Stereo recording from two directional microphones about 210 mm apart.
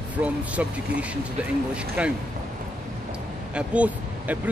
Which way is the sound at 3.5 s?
5° right (ahead or behind).